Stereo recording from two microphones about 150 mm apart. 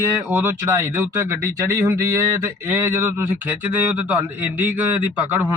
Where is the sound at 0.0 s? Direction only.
15° right (ahead or behind).